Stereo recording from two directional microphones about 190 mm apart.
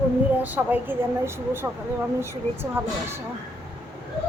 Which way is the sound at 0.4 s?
10° right (ahead or behind).